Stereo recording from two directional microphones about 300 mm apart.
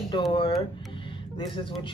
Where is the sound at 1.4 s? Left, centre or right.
Centre.